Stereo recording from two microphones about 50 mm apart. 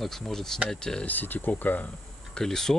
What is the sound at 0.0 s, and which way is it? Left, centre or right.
Speech, centre.